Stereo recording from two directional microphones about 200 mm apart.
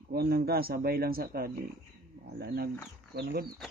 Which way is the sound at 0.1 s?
50° right (ahead or behind).